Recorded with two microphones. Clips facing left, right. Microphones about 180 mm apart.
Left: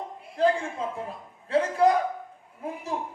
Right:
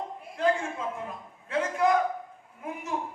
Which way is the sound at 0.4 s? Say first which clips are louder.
Left 3 dB; 35° left (ahead or behind).